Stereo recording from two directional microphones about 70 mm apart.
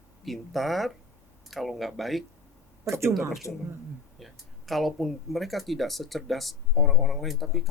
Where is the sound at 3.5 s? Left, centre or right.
Centre.